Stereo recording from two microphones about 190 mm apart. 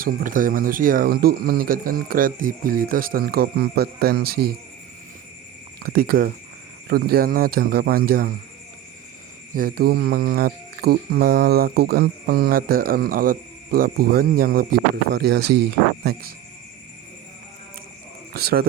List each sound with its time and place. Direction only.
0.0 s speech: 45° right (ahead or behind)
5.8 s speech: 55° right (ahead or behind)
9.6 s speech: 50° right (ahead or behind)
18.3 s speech: 55° right (ahead or behind)